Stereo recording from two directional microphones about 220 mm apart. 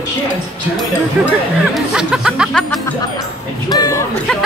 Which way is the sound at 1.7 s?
5° right (ahead or behind).